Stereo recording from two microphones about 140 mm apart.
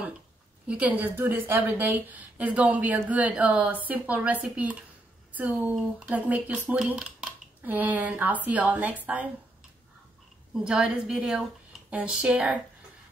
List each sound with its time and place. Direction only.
0.7 s a woman's voice: 10° right (ahead or behind)
10.6 s a woman's voice: 5° right (ahead or behind)